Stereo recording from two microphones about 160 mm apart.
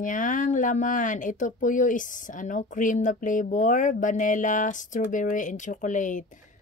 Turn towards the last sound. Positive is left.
turn(degrees=50)  # may be behind; listen again after turning